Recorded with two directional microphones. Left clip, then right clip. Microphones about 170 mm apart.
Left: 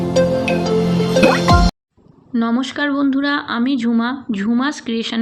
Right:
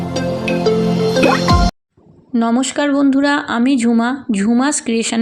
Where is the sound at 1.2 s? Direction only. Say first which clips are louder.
Left 1 dB; centre (ahead or behind).